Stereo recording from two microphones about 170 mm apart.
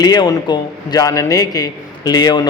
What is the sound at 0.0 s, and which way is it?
A man's voice, 25° left (ahead or behind).